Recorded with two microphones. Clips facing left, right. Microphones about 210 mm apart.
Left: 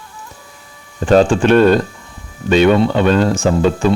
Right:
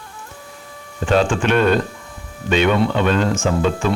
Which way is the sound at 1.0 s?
40° left (ahead or behind).